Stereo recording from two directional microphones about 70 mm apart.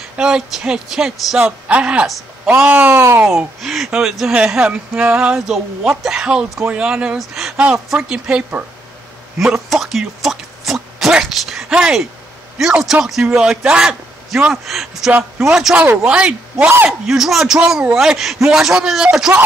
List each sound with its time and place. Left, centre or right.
0.2 s a man's voice: centre; by 3.0 s right
3.3 s a man's voice: centre